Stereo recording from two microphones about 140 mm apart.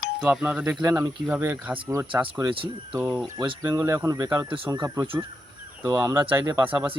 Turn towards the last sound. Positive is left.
turn(degrees=-25)  # may be behind; listen again after turning